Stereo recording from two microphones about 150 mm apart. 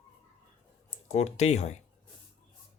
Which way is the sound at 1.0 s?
50° left (ahead or behind).